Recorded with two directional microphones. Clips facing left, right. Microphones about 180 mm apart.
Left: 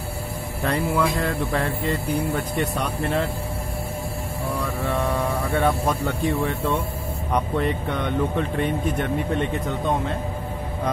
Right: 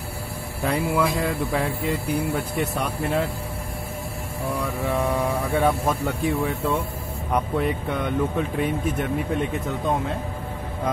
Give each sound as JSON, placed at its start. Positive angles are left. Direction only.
{"t": 0.7, "sound": "speech", "side_deg": -5}
{"t": 4.5, "sound": "speech", "side_deg": -10}